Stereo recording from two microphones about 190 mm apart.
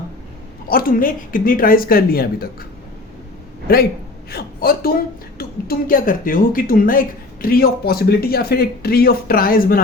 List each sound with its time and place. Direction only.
0.7 s speech: 50° left (ahead or behind)
4.3 s speech: 55° left (ahead or behind)